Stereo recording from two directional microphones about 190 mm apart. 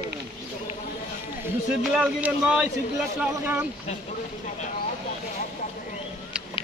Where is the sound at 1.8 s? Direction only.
5° right (ahead or behind).